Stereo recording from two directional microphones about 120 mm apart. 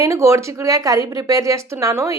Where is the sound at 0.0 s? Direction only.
25° right (ahead or behind).